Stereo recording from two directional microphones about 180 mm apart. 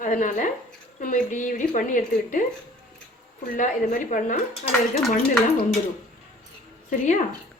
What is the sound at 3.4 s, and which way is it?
Speech, 50° left (ahead or behind).